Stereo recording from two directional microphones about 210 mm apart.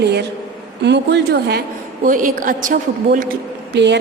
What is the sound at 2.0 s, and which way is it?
A woman's voice, 40° right (ahead or behind).